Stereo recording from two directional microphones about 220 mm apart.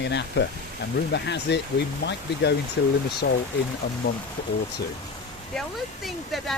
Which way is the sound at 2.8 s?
50° left (ahead or behind).